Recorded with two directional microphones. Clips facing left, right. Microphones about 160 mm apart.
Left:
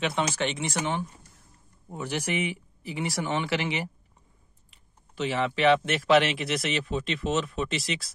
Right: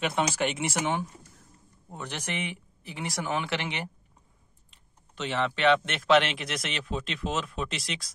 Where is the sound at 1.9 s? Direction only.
10° left (ahead or behind).